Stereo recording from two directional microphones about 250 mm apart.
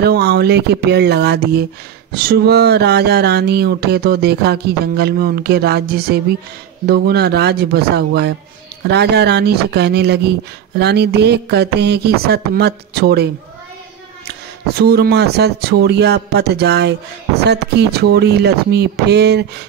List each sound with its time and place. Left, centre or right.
0.0 s speech: right
14.8 s speech: right